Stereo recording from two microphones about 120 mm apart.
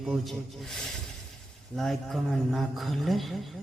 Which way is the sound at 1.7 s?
Centre (ahead or behind).